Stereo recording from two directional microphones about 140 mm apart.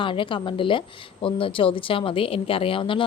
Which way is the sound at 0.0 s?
35° left (ahead or behind).